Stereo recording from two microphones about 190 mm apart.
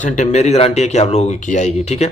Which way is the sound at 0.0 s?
40° left (ahead or behind).